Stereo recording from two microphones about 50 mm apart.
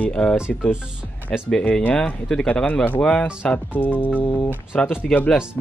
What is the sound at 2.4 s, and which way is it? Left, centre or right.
Speech, left.